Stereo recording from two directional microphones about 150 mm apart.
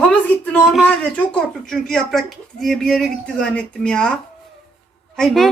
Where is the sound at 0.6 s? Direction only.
5° right (ahead or behind).